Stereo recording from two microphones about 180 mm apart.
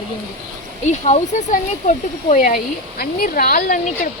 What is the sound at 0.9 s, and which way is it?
Speech, 40° left (ahead or behind).